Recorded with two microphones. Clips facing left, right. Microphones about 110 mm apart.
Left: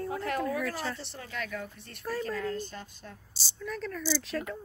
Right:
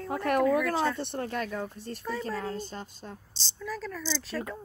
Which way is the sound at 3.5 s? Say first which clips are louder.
Even; centre (ahead or behind).